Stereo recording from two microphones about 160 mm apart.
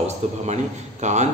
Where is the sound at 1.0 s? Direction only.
45° right (ahead or behind).